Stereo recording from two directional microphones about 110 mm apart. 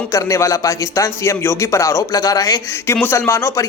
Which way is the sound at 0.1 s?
30° left (ahead or behind).